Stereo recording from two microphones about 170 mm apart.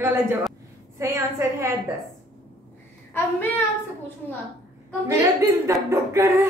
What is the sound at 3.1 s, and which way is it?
Speech, 15° left (ahead or behind).